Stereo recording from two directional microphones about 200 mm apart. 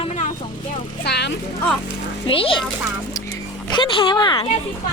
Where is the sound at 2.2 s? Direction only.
25° left (ahead or behind).